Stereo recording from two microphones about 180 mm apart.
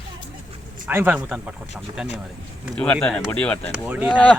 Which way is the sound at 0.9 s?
10° right (ahead or behind).